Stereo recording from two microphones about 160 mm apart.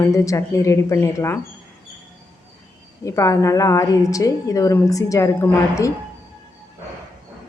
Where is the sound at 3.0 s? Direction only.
20° left (ahead or behind).